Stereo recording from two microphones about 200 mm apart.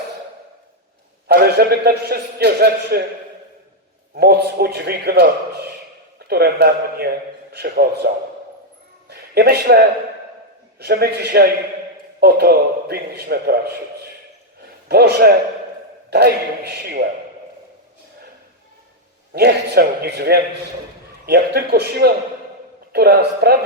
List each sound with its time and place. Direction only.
1.3 s a man's voice: 50° right (ahead or behind)
4.1 s a man's voice: 50° right (ahead or behind)
6.2 s a man's voice: 50° right (ahead or behind)
9.0 s a sound: 55° right (ahead or behind)
10.8 s a man's voice: 55° right (ahead or behind)
14.8 s a man's voice: 50° right (ahead or behind)
19.3 s a man's voice: 55° right (ahead or behind)